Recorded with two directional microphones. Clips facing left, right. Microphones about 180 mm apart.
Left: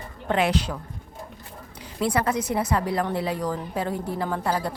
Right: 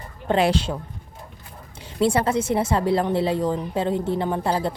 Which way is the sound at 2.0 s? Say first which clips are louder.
Right 4 dB; 25° right (ahead or behind).